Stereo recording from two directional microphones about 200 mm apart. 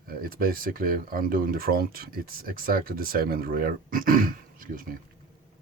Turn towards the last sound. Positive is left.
turn(degrees=-45)  # may be behind; listen again after turning